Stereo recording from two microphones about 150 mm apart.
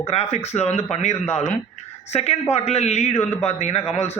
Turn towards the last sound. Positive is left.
turn(degrees=45)  # may be behind; listen again after turning